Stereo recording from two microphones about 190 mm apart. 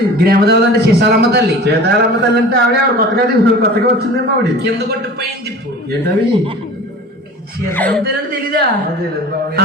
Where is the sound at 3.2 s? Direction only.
55° right (ahead or behind).